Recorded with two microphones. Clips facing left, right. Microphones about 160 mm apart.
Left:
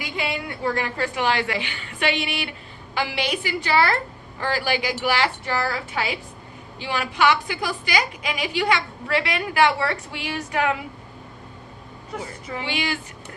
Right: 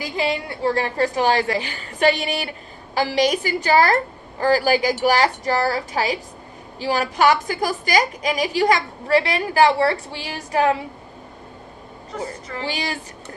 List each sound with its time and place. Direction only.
0.0 s a woman's voice: 30° right (ahead or behind)
12.1 s a woman's voice: 10° left (ahead or behind)
12.6 s a woman's voice: 35° right (ahead or behind)